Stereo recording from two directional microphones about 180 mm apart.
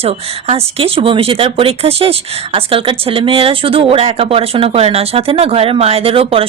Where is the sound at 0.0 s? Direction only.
35° right (ahead or behind).